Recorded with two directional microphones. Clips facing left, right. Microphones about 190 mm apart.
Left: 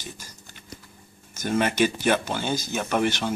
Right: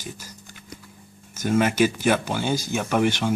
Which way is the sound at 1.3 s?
10° right (ahead or behind).